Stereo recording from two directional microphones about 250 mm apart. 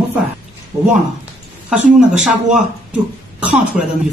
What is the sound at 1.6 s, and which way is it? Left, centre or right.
Speech, centre.